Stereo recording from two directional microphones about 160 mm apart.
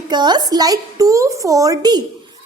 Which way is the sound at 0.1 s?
25° right (ahead or behind).